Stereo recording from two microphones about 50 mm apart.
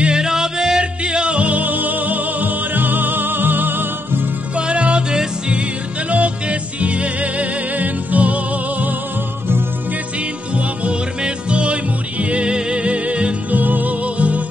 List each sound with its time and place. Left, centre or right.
0.0 s music: centre; by 4.3 s right
4.6 s music: right
10.5 s music: right
13.6 s music: right